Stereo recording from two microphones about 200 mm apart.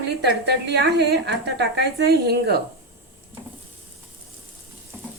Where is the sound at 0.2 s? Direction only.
55° right (ahead or behind).